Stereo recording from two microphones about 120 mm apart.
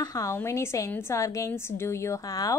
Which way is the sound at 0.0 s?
30° left (ahead or behind).